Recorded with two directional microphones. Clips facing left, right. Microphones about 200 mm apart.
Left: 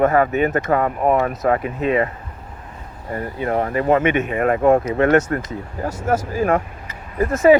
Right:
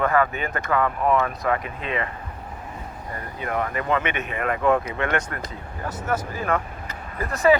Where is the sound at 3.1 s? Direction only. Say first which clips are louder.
Left 8 dB; 35° left (ahead or behind).